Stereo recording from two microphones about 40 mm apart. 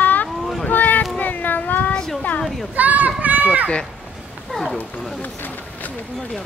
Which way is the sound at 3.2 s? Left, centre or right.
Right.